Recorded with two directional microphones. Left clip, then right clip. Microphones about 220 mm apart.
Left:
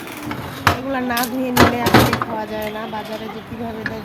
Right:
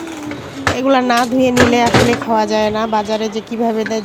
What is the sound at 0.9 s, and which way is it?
Speech, 40° right (ahead or behind).